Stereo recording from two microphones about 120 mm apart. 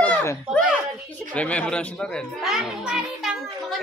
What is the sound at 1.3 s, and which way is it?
Speech, 10° left (ahead or behind).